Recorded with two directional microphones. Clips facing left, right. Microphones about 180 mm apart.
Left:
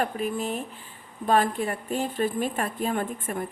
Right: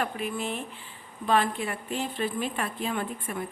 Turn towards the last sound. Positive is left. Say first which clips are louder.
# left 3 dB
turn(degrees=45)  # may be behind; listen again after turning